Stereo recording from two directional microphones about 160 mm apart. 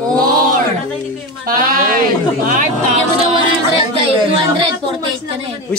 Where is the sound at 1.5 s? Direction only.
60° right (ahead or behind).